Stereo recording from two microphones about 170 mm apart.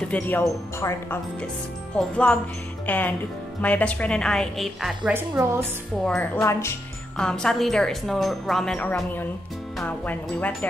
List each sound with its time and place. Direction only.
0.1 s speech: 15° left (ahead or behind)
5.1 s a woman's voice: 10° right (ahead or behind)
6.0 s speech: 5° left (ahead or behind)
6.4 s speech: 15° left (ahead or behind)
7.2 s speech: 5° left (ahead or behind)